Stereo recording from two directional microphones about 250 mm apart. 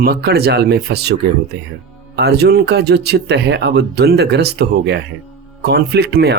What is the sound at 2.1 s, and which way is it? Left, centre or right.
Speech, right.